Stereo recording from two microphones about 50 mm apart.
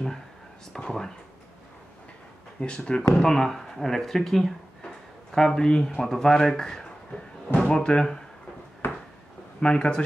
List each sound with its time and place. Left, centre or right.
0.7 s speech: centre
2.6 s speech: left
8.8 s a sound: left
9.6 s speech: centre